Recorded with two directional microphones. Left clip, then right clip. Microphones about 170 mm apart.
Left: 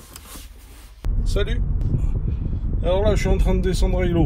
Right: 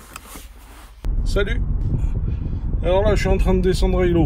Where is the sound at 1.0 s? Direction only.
Centre (ahead or behind).